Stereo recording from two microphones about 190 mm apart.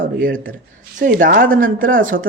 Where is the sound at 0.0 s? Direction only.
45° right (ahead or behind).